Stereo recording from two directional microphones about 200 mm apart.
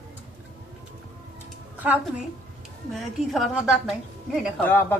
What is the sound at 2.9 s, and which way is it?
A woman's voice, centre (ahead or behind).